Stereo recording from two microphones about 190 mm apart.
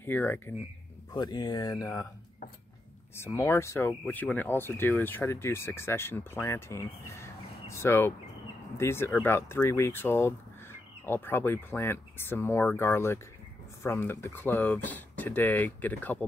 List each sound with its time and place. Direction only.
0.0 s speech: 10° left (ahead or behind)
1.1 s speech: 20° left (ahead or behind)
3.2 s speech: 15° left (ahead or behind)